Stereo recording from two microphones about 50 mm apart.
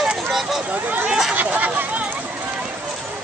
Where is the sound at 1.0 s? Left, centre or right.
Centre.